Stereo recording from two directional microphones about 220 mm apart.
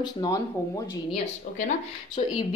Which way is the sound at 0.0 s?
20° left (ahead or behind).